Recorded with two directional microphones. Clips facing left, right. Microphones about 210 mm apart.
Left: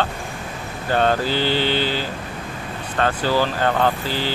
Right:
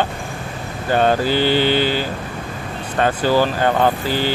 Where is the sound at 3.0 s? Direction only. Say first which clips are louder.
Right 3 dB; 15° right (ahead or behind).